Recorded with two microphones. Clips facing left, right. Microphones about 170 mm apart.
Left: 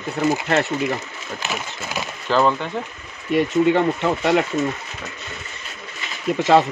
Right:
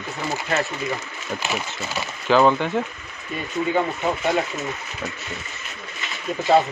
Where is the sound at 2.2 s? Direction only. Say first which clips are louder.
Right 2 dB; centre (ahead or behind).